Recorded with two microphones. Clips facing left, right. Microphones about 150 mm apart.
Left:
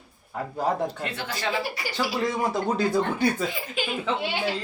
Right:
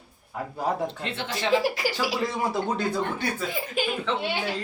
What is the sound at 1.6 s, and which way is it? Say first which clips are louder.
Speech: right 3 dB; 90° right.